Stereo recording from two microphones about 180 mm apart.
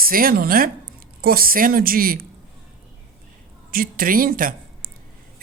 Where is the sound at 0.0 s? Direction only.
55° right (ahead or behind).